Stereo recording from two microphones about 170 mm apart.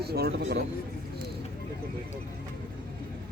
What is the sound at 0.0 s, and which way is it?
Speech, 70° right (ahead or behind).